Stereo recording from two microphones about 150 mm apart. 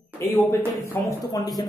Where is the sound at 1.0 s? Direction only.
15° left (ahead or behind).